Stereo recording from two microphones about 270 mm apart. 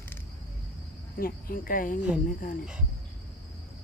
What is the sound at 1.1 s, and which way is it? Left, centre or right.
Speech, left.